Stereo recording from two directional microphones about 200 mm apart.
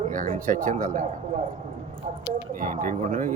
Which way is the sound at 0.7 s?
40° right (ahead or behind).